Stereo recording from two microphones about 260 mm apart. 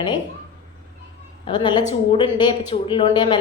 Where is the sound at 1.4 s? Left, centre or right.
Centre.